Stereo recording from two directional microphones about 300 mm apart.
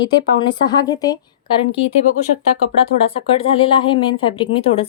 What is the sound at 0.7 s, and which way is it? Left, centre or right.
A woman's voice, centre.